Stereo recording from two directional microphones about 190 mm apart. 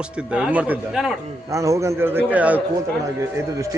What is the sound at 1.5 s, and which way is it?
A man's voice, 15° right (ahead or behind).